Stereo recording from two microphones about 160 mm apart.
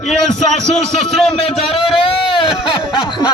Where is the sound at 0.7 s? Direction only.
Centre (ahead or behind).